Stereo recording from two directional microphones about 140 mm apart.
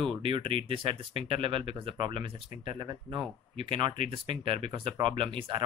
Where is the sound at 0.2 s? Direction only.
40° right (ahead or behind).